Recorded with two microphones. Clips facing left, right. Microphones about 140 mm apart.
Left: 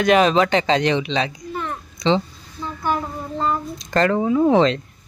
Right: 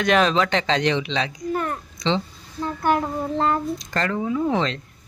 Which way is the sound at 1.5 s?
50° right (ahead or behind).